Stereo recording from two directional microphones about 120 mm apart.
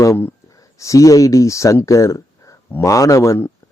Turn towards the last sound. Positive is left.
turn(degrees=20)  # may be behind; listen again after turning